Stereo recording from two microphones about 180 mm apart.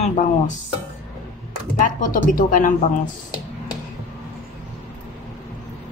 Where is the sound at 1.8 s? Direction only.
50° left (ahead or behind).